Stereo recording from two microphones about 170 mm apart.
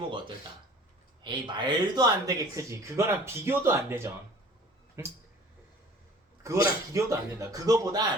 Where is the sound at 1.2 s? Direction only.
25° right (ahead or behind).